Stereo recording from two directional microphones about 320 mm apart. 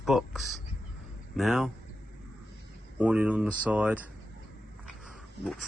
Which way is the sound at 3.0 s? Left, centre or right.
Centre.